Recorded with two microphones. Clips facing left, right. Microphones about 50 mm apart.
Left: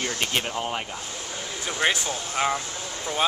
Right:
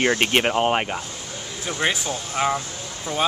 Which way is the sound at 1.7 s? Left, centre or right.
Centre.